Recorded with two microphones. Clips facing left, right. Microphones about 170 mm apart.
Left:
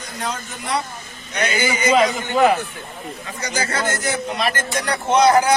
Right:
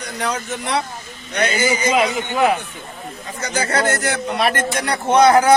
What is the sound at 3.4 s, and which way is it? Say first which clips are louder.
A man's voice: right 4 dB; 65° right (ahead or behind).